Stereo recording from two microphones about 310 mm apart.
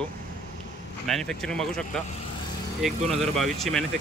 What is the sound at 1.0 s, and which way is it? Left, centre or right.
Speech, centre.